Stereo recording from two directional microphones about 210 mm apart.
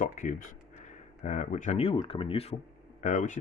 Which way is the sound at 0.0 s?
40° left (ahead or behind).